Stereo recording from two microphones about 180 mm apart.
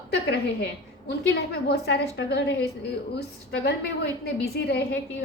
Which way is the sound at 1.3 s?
65° left (ahead or behind).